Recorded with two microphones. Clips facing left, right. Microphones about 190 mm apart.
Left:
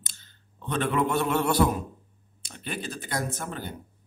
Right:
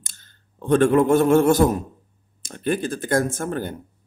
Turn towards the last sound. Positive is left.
turn(degrees=-50)  # may be behind; listen again after turning